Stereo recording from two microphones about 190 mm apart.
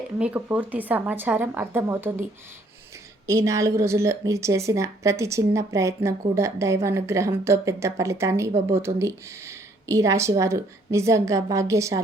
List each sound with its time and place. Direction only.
0.2 s a woman's voice: 10° right (ahead or behind)
3.2 s a woman's voice: 15° right (ahead or behind)